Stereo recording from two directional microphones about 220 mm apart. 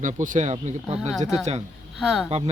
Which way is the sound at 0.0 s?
35° right (ahead or behind).